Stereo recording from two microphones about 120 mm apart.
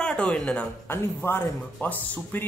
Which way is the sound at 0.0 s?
10° left (ahead or behind).